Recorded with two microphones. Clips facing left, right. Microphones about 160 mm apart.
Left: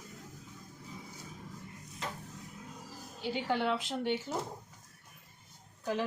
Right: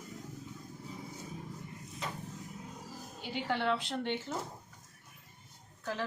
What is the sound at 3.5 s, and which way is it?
Speech, 10° left (ahead or behind).